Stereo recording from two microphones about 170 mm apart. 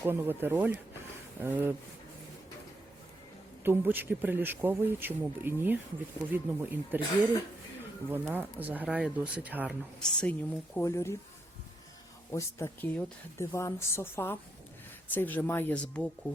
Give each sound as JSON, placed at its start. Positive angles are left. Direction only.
{"t": 0.0, "sound": "speech", "side_deg": -10}
{"t": 3.6, "sound": "speech", "side_deg": -10}
{"t": 8.1, "sound": "speech", "side_deg": -10}
{"t": 10.0, "sound": "speech", "side_deg": 5}
{"t": 12.3, "sound": "speech", "side_deg": 15}